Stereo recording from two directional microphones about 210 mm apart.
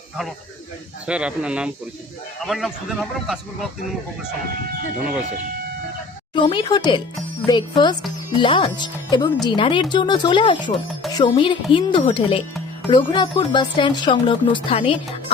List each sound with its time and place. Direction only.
1.0 s speech: 5° right (ahead or behind)
6.3 s speech: 25° left (ahead or behind)